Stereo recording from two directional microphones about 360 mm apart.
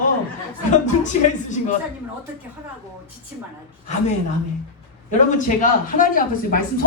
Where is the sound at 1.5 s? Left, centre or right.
Centre.